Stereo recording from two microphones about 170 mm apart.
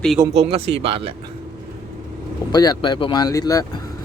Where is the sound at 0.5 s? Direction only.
35° right (ahead or behind).